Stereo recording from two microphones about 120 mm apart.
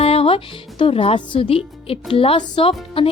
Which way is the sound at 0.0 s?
55° left (ahead or behind).